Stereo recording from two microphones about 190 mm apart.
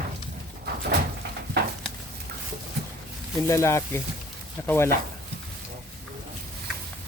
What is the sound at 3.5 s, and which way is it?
Speech, 15° left (ahead or behind).